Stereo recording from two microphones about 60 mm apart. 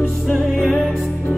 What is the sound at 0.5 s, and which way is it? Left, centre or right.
Music, left.